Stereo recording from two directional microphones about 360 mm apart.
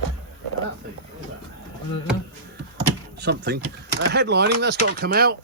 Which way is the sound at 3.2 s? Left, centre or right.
Right.